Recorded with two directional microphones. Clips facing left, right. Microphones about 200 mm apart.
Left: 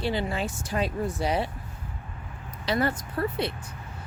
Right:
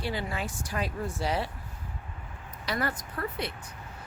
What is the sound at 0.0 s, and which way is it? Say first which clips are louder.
Speech: left 5 dB; 25° left (ahead or behind).